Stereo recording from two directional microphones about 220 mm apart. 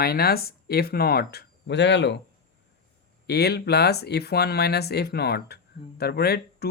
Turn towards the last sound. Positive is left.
turn(degrees=45)  # may be behind; listen again after turning